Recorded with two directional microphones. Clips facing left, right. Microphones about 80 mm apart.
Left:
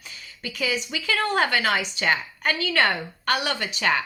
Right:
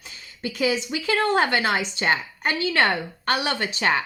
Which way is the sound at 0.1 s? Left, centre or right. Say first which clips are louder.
Right 5 dB; right.